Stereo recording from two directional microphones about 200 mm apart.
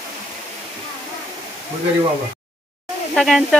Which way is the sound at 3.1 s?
Centre (ahead or behind).